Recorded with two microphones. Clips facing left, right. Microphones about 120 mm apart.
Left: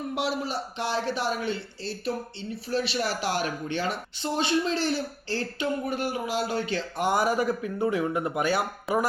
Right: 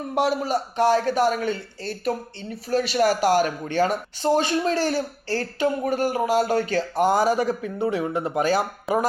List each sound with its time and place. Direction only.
0.1 s speech: 45° right (ahead or behind)